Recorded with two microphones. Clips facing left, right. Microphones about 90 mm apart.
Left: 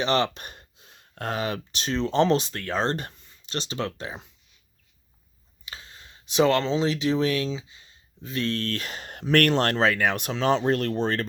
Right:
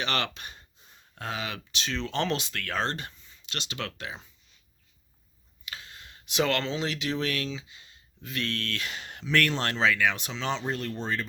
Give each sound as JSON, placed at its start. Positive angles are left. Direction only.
{"t": 0.0, "sound": "speech", "side_deg": 30}
{"t": 0.3, "sound": "speech", "side_deg": 45}
{"t": 0.8, "sound": "a sound", "side_deg": 90}
{"t": 1.1, "sound": "speech", "side_deg": 50}
{"t": 2.9, "sound": "speech", "side_deg": 50}
{"t": 3.4, "sound": "speech", "side_deg": 35}
{"t": 5.7, "sound": "speech", "side_deg": 30}